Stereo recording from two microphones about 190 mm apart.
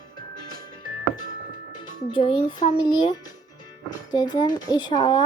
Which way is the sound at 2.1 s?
25° left (ahead or behind).